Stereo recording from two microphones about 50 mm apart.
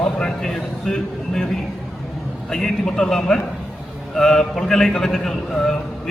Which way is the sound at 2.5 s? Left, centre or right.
Centre.